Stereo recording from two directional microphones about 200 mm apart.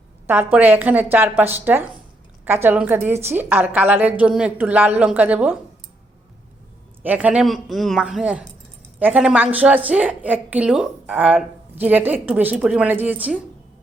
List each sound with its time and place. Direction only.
0.3 s a woman's voice: 10° right (ahead or behind)
7.0 s a woman's voice: 5° right (ahead or behind)